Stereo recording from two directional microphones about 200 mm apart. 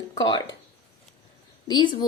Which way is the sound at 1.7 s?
25° left (ahead or behind).